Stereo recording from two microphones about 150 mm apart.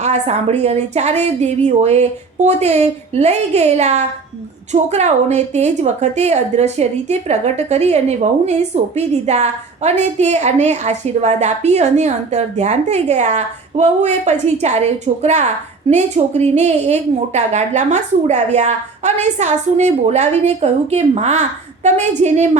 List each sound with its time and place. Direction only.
0.0 s a woman's voice: 45° right (ahead or behind)